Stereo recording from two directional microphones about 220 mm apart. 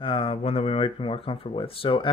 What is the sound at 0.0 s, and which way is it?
Speech, 25° left (ahead or behind).